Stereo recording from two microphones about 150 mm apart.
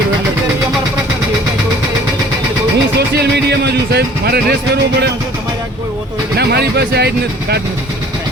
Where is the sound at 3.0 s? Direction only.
90° right.